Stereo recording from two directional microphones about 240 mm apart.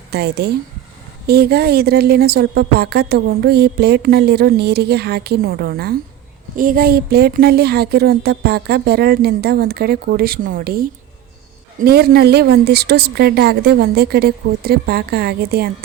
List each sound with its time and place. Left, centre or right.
0.1 s speech: right
11.9 s speech: right